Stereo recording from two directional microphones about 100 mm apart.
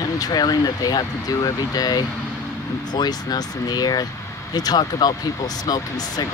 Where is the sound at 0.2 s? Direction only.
40° left (ahead or behind).